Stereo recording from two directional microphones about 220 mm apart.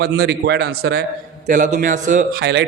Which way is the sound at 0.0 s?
50° right (ahead or behind).